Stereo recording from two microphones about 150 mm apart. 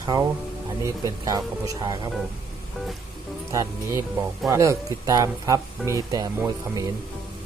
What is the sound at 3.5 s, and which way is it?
Speech, 20° right (ahead or behind).